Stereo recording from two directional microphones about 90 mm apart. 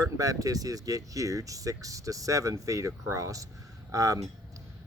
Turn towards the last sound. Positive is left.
turn(degrees=-40)  # may be behind; listen again after turning